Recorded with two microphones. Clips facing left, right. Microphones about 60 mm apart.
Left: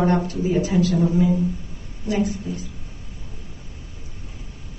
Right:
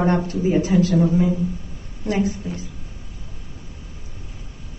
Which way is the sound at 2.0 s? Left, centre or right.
Right.